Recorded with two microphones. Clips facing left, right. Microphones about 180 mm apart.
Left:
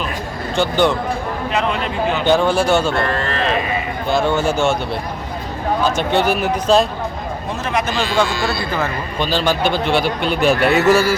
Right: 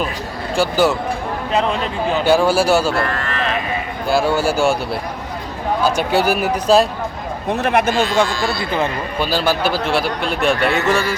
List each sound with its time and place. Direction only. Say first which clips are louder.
0.5 s speech: even; 5° right (ahead or behind)
1.5 s a man's voice: right 2 dB; 35° right (ahead or behind)
2.2 s speech: right 1 dB; 5° right (ahead or behind)
3.2 s speech: left 3 dB; 30° left (ahead or behind)
4.1 s speech: right 1 dB; 5° right (ahead or behind)
5.8 s speech: right 1 dB; 5° right (ahead or behind)
7.5 s a man's voice: right 5 dB; 60° right (ahead or behind)
9.1 s a man's voice: left 1 dB; 10° right (ahead or behind)